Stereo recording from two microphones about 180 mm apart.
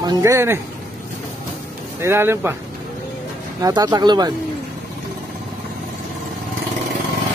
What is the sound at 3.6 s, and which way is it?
Speech, 20° right (ahead or behind).